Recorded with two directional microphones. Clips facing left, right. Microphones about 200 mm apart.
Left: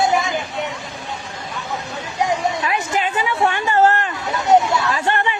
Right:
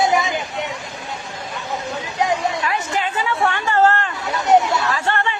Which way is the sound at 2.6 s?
20° left (ahead or behind).